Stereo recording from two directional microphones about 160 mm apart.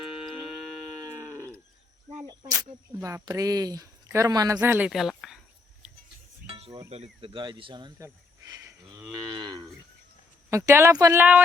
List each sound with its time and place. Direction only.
1.0 s livestock: 15° right (ahead or behind)
2.2 s a sound: 25° right (ahead or behind)
2.6 s speech: 15° right (ahead or behind)
4.5 s speech: 10° right (ahead or behind)
6.5 s speech: 35° right (ahead or behind)
8.0 s snake: 20° right (ahead or behind)
9.3 s livestock: 25° right (ahead or behind)
10.7 s speech: 20° right (ahead or behind)